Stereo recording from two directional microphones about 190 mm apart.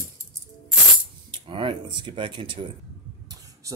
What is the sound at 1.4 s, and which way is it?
Speech, 25° right (ahead or behind).